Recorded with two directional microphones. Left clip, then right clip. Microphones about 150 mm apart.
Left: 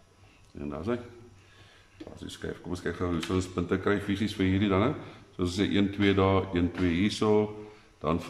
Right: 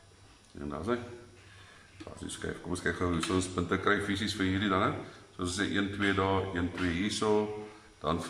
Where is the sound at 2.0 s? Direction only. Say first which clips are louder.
Left 1 dB; centre (ahead or behind).